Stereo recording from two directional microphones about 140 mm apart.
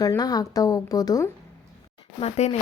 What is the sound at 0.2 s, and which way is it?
A woman's voice, 25° left (ahead or behind).